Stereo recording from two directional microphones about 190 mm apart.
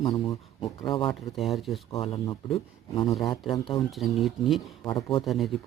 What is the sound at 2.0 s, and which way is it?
A man's voice, 30° left (ahead or behind).